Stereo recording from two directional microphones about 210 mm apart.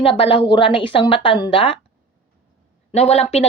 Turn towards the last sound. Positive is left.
turn(degrees=30)  # may be behind; listen again after turning